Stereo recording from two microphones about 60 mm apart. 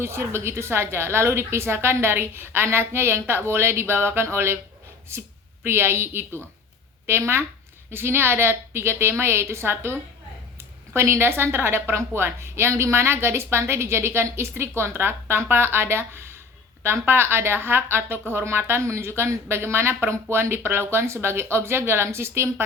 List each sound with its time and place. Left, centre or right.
0.0 s speech: right
5.6 s speech: right